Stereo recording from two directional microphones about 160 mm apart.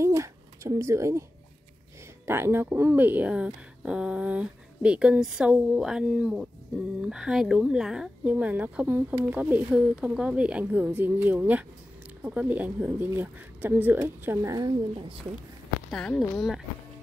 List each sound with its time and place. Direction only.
0.0 s a sound: 20° right (ahead or behind)
2.2 s speech: 15° right (ahead or behind)
15.0 s a woman's voice: 35° right (ahead or behind)
15.9 s speech: 5° left (ahead or behind)